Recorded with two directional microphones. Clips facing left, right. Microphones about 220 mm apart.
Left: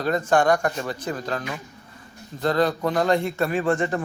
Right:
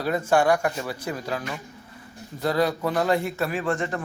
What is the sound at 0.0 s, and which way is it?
A man's voice, 10° right (ahead or behind).